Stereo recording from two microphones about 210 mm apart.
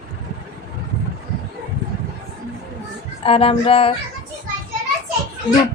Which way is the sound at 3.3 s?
25° left (ahead or behind).